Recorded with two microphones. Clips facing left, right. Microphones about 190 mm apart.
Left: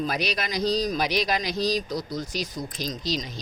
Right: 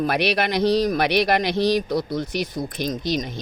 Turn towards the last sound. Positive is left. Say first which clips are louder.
# right 5 dB
turn(degrees=-55)  # may be behind; listen again after turning